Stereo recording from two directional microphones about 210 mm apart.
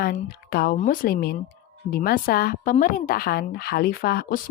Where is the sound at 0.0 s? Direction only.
45° left (ahead or behind).